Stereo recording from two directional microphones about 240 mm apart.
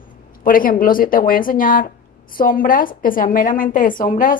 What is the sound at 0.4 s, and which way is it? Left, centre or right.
A woman's voice, left.